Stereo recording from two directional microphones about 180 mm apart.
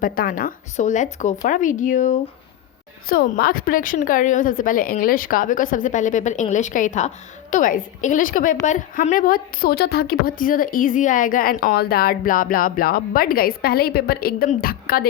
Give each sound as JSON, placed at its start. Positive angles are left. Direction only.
{"t": 0.0, "sound": "a woman's voice", "side_deg": 50}